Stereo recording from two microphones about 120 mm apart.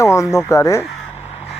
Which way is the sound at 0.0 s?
25° left (ahead or behind).